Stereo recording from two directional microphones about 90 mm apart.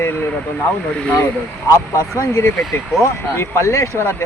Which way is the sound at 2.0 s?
35° left (ahead or behind).